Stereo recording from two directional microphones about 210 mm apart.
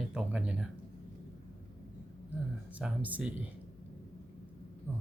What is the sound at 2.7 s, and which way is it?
Speech, 5° right (ahead or behind).